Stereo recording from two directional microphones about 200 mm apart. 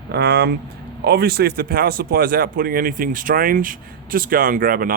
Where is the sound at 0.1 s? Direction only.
50° right (ahead or behind).